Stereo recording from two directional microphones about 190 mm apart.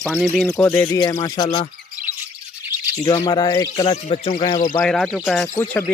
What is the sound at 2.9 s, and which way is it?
A man's voice, 20° left (ahead or behind).